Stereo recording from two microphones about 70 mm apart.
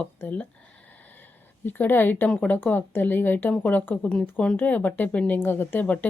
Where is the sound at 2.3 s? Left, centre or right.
Centre.